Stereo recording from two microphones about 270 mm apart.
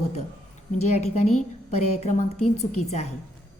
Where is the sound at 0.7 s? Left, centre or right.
Left.